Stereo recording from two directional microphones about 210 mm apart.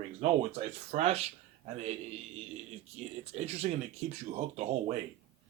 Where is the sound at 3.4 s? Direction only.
30° right (ahead or behind).